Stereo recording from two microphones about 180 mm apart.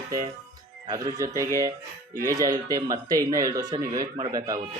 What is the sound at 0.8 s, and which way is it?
Speech, 20° right (ahead or behind).